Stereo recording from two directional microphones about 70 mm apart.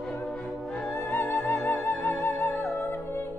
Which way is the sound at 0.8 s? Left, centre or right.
Left.